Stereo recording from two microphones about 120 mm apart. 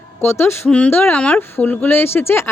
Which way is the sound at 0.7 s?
10° left (ahead or behind).